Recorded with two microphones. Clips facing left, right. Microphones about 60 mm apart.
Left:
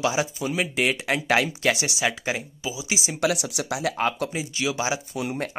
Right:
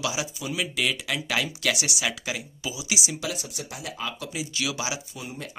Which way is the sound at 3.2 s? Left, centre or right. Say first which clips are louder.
Left 9 dB; left.